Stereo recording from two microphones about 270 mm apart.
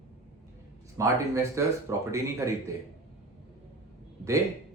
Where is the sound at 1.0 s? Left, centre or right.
Centre.